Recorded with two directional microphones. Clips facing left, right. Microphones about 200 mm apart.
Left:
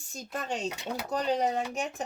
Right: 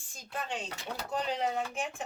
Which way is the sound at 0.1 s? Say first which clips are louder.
Left 4 dB; 45° left (ahead or behind).